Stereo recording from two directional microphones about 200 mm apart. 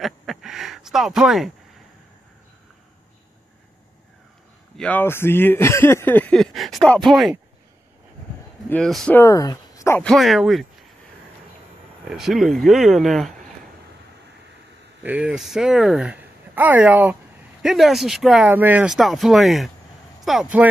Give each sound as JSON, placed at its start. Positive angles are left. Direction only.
{"t": 0.0, "sound": "a sound", "side_deg": 0}
{"t": 4.7, "sound": "speech", "side_deg": 5}
{"t": 8.6, "sound": "speech", "side_deg": 0}
{"t": 12.1, "sound": "speech", "side_deg": 0}
{"t": 15.0, "sound": "speech", "side_deg": -5}